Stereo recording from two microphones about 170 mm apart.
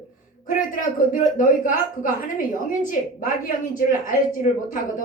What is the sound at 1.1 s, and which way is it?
A woman's voice, 50° left (ahead or behind).